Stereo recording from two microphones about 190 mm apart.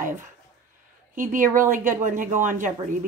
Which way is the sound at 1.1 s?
45° right (ahead or behind).